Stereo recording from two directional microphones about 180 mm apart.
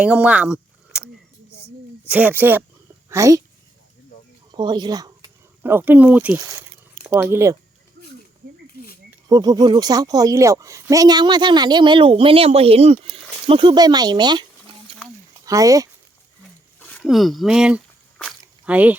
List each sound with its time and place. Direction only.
0.0 s a sound: 5° right (ahead or behind)
2.0 s speech: 10° right (ahead or behind)
4.5 s speech: 25° right (ahead or behind)
9.0 s speech: 20° right (ahead or behind)
15.4 s speech: 20° right (ahead or behind)
16.8 s a sound: 5° left (ahead or behind)